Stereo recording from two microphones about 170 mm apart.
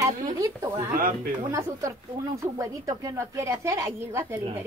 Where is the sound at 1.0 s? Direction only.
55° right (ahead or behind).